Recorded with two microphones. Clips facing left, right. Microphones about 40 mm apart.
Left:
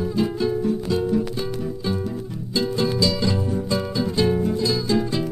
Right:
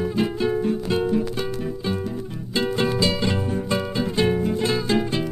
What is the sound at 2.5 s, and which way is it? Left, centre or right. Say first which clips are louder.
Music: even; right.